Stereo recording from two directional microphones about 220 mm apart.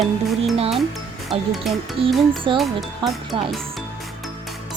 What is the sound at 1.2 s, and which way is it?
Speech, centre (ahead or behind).